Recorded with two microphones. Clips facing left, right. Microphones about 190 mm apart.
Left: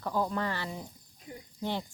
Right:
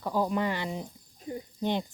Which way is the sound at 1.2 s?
35° right (ahead or behind).